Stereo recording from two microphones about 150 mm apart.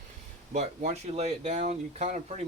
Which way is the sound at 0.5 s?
50° right (ahead or behind).